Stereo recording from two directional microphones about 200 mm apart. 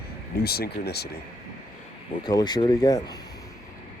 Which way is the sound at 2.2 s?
20° left (ahead or behind).